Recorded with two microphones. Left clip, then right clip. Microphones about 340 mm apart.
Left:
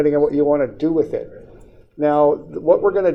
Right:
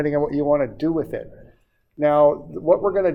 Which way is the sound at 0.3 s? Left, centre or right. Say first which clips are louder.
Left 3 dB; right.